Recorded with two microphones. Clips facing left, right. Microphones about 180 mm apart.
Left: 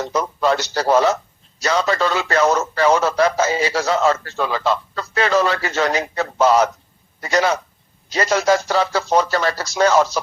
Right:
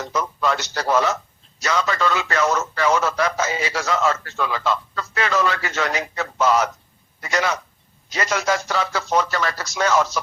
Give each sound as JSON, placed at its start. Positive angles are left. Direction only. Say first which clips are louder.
{"t": 0.0, "sound": "a man's voice", "louder": "left 4 dB", "side_deg": 35}